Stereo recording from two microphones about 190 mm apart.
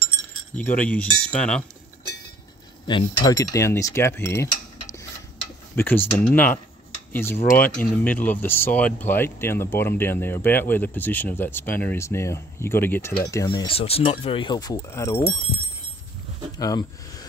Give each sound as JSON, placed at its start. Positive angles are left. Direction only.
{"t": 0.6, "sound": "speech", "side_deg": 5}
{"t": 2.9, "sound": "speech", "side_deg": 20}
{"t": 5.8, "sound": "speech", "side_deg": 10}
{"t": 7.6, "sound": "speech", "side_deg": 45}
{"t": 8.0, "sound": "speech", "side_deg": 10}
{"t": 13.7, "sound": "speech", "side_deg": 30}
{"t": 16.5, "sound": "speech", "side_deg": 20}